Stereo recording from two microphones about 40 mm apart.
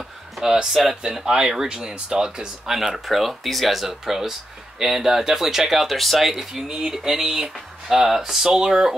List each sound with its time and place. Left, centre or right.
0.4 s speech: centre
2.7 s speech: centre
6.7 s speech: centre
7.0 s speech: centre